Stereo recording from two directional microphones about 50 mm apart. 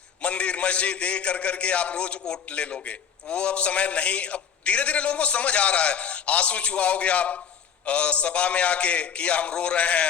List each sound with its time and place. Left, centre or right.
0.2 s a man's voice: left